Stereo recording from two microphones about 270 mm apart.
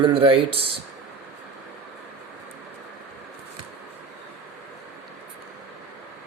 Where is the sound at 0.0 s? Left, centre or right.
Centre.